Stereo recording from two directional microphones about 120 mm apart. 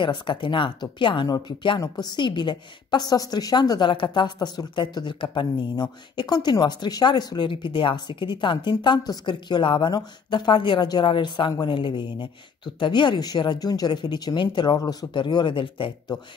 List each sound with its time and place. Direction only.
0.0 s a woman's voice: 45° left (ahead or behind)